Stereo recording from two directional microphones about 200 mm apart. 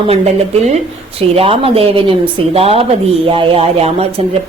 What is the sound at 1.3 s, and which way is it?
Speech, 30° right (ahead or behind).